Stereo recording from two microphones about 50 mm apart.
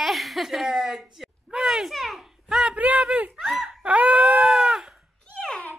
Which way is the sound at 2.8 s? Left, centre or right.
Right.